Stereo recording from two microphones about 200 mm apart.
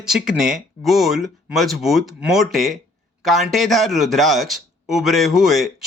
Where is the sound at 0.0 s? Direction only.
Centre (ahead or behind).